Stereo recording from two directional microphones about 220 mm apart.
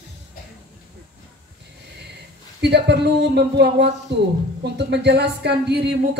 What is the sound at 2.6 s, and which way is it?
Speech, 50° right (ahead or behind).